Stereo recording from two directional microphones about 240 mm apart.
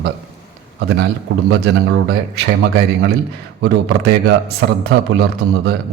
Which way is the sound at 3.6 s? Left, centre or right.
Right.